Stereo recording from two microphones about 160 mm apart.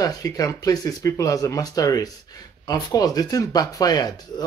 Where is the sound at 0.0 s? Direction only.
20° left (ahead or behind).